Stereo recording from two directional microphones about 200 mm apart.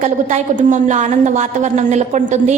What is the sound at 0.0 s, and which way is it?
A woman's voice, 35° right (ahead or behind).